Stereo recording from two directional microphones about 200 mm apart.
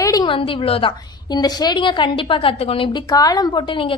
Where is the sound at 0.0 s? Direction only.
20° left (ahead or behind).